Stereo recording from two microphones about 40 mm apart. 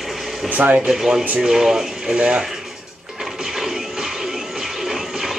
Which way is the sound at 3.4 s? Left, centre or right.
Centre.